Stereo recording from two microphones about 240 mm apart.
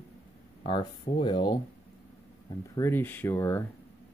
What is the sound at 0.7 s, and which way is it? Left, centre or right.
Speech, left.